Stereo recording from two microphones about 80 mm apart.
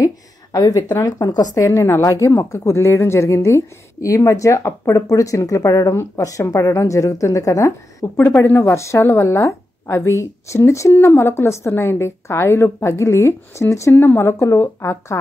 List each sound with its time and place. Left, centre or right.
0.0 s a woman's voice: left
8.2 s a woman's voice: left